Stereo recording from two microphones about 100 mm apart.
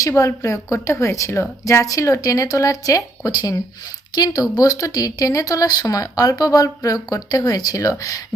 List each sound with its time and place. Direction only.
0.0 s speech: 30° left (ahead or behind)